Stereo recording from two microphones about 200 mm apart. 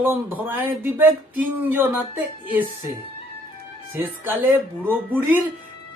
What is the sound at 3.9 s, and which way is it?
A man's voice, 10° right (ahead or behind).